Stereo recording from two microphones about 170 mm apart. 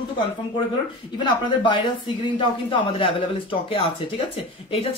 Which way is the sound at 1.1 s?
30° left (ahead or behind).